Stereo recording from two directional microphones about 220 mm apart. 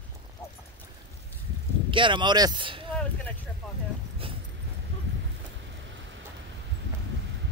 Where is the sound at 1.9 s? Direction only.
20° right (ahead or behind).